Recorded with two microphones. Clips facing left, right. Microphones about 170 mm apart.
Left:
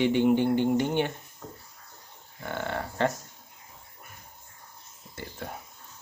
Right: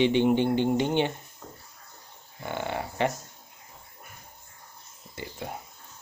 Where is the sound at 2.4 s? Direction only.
15° right (ahead or behind).